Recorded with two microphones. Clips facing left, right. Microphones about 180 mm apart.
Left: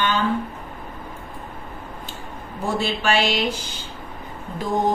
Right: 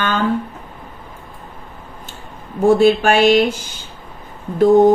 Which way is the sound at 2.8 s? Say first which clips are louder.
Right 10 dB; 50° right (ahead or behind).